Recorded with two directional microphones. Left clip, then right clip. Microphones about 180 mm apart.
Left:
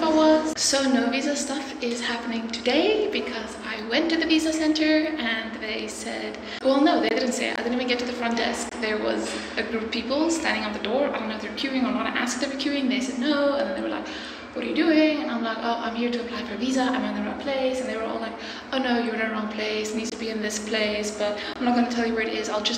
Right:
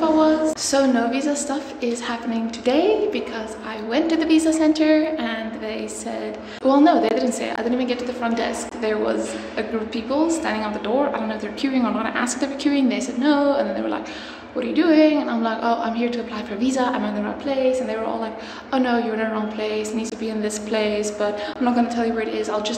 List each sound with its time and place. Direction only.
0.0 s a sound: 40° right (ahead or behind)
2.0 s a woman's voice: 45° right (ahead or behind)
6.6 s a woman's voice: 50° right (ahead or behind)
11.6 s a woman's voice: 55° right (ahead or behind)
14.6 s a woman's voice: 60° right (ahead or behind)